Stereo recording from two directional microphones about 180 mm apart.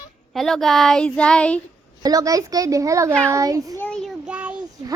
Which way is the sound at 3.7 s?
5° left (ahead or behind).